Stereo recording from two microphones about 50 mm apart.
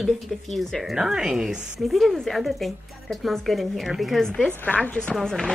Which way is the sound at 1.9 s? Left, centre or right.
Centre.